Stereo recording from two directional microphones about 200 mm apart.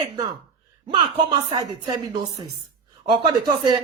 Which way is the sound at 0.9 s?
25° right (ahead or behind).